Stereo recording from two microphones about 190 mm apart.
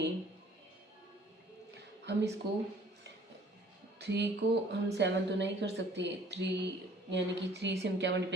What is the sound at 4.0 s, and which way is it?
A woman's voice, 65° right (ahead or behind).